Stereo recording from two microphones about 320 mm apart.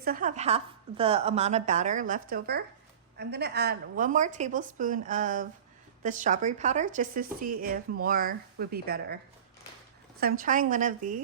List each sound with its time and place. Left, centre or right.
0.0 s speech: right
10.2 s speech: right